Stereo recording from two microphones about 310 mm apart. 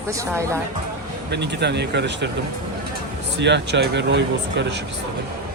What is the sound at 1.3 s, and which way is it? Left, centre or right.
Speech, right.